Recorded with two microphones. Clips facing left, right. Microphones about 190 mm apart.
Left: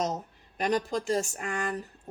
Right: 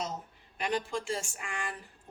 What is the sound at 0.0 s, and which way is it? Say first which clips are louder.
Speech: left 7 dB; 40° left (ahead or behind).